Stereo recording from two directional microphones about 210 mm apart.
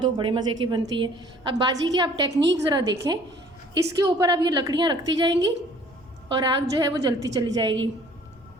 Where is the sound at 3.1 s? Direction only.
20° right (ahead or behind).